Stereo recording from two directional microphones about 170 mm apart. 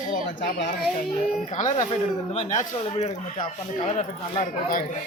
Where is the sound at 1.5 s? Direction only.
45° left (ahead or behind).